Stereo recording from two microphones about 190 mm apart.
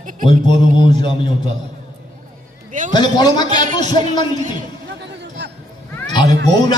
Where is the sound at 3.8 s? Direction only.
40° right (ahead or behind).